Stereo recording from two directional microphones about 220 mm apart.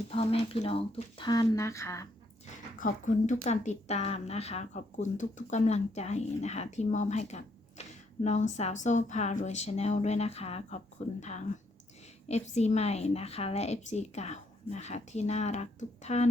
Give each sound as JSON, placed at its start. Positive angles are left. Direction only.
{"t": 0.1, "sound": "speech", "side_deg": 25}
{"t": 2.7, "sound": "speech", "side_deg": 35}